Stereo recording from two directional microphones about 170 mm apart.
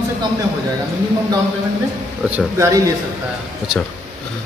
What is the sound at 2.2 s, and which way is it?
Speech, 10° right (ahead or behind).